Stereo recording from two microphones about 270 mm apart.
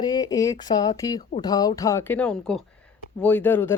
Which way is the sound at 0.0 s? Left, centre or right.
Centre.